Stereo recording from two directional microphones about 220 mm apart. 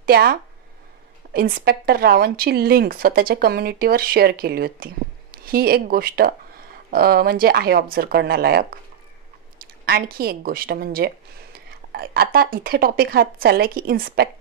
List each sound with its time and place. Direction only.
0.0 s a woman's voice: 45° right (ahead or behind)